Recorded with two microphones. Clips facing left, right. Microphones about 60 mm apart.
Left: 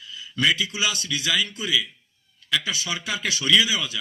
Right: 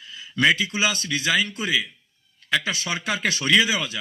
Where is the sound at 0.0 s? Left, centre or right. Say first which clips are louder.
Right 3 dB; right.